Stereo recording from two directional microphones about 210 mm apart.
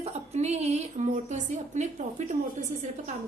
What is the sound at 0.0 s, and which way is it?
A woman's voice, 30° right (ahead or behind).